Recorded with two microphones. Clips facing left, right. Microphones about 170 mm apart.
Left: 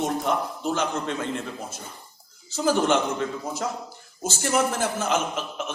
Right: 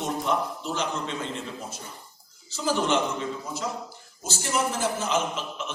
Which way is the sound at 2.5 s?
50° left (ahead or behind).